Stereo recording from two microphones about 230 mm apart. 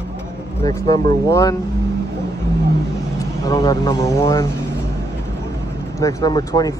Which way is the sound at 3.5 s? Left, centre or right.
Centre.